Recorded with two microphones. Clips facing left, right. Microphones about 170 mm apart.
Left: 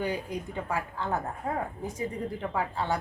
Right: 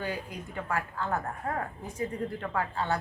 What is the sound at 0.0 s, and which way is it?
Speech, 15° left (ahead or behind).